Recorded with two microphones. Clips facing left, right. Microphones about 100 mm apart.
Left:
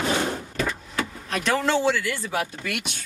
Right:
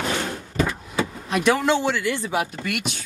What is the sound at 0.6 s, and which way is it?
Vehicle, 15° right (ahead or behind).